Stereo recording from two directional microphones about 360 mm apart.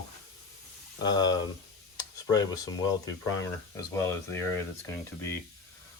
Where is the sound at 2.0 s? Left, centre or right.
Centre.